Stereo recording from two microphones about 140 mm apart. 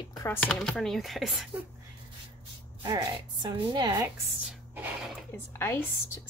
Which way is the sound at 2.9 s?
30° right (ahead or behind).